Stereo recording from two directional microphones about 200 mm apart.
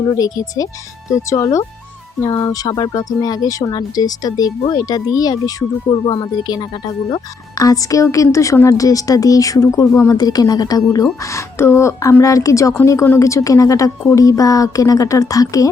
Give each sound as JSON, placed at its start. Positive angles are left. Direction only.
{"t": 0.1, "sound": "a woman's voice", "side_deg": 15}